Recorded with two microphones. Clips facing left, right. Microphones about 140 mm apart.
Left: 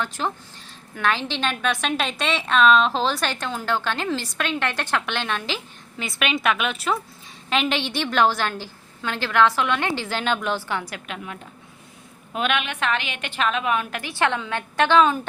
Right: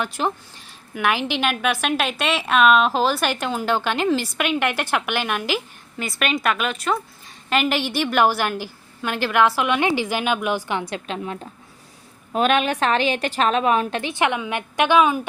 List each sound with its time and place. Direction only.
0.0 s a woman's voice: 15° right (ahead or behind); by 14.0 s 35° right (ahead or behind)
14.0 s a woman's voice: 20° right (ahead or behind)